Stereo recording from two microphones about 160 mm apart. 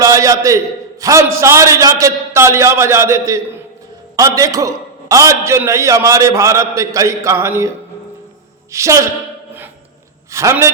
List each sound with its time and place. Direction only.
0.0 s a sound: 20° right (ahead or behind)
1.0 s a man's voice: 20° right (ahead or behind)
8.7 s a man's voice: 20° right (ahead or behind)
10.3 s a man's voice: 20° right (ahead or behind)